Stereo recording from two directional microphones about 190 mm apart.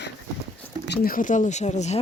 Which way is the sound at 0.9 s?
50° left (ahead or behind).